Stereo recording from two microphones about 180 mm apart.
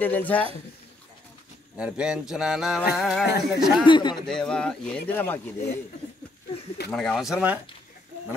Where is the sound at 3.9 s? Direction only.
25° left (ahead or behind).